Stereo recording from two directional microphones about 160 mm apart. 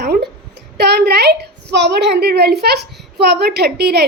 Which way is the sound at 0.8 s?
90° right.